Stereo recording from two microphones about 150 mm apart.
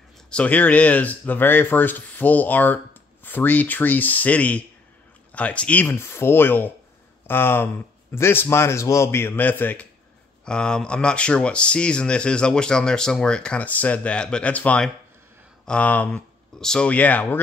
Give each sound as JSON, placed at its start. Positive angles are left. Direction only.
{"t": 0.3, "sound": "speech", "side_deg": 10}